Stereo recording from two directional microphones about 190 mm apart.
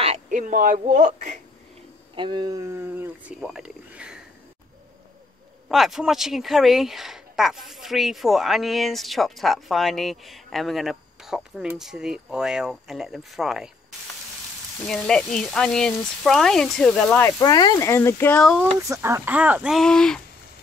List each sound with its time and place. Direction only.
0.0 s speech: 40° right (ahead or behind)
2.1 s speech: 25° right (ahead or behind); by 4.2 s 5° right (ahead or behind)
5.7 s speech: centre (ahead or behind)
14.9 s speech: 5° left (ahead or behind)
18.6 s speech: 15° right (ahead or behind); by 20.2 s 5° left (ahead or behind)